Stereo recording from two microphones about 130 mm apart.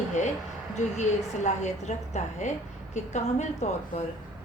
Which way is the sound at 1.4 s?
60° left (ahead or behind).